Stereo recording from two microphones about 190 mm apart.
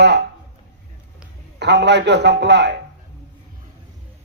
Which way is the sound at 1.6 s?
65° right (ahead or behind).